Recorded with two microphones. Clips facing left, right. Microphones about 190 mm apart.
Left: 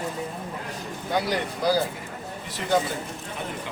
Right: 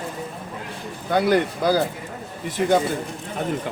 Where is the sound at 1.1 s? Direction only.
55° right (ahead or behind).